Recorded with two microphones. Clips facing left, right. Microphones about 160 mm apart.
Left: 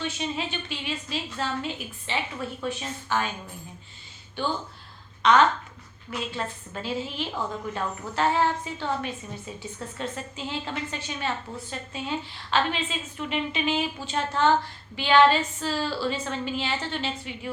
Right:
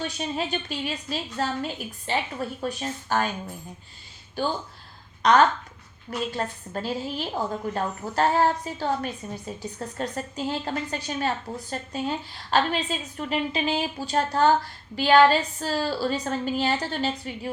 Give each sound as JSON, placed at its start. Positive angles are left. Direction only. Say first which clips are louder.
{"t": 0.0, "sound": "a woman's voice", "louder": "right 1 dB", "side_deg": -40}
{"t": 5.2, "sound": "a woman's voice", "louder": "right 1 dB", "side_deg": -40}